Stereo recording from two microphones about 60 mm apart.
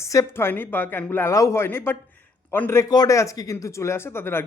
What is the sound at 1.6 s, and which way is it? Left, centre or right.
Speech, left.